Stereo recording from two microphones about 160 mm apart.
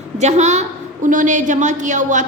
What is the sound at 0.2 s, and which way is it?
A woman's voice, 45° right (ahead or behind).